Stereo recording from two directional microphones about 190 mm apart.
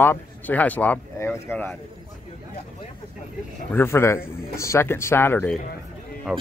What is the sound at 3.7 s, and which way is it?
Speech, 15° left (ahead or behind).